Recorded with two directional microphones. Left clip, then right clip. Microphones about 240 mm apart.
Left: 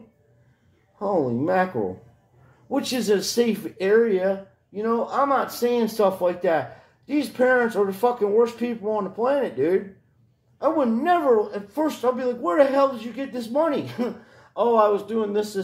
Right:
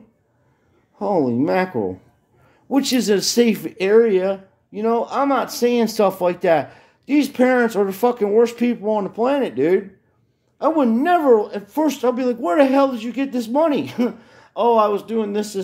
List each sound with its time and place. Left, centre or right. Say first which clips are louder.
0.9 s speech: right 4 dB; right
2.7 s speech: right 4 dB; right